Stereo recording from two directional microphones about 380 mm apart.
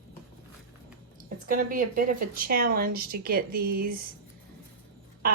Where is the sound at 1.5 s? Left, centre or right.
Right.